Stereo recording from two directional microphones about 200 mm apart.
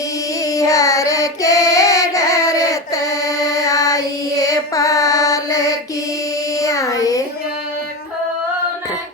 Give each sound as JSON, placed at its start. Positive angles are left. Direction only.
{"t": 0.4, "sound": "child singing", "side_deg": 15}